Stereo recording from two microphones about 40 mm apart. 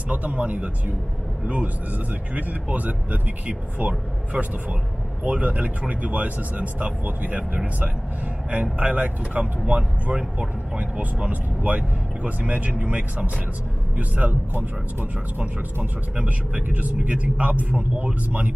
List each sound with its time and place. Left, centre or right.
0.1 s a man's voice: right
11.2 s speech: right
14.5 s speech: right
15.8 s speech: right